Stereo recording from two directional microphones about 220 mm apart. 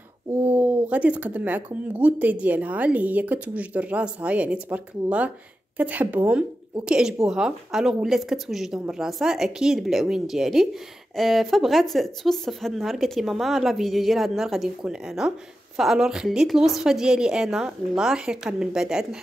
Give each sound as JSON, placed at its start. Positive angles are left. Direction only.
{"t": 0.5, "sound": "speech", "side_deg": -10}